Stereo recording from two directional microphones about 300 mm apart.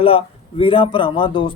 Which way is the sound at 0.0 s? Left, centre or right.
Centre.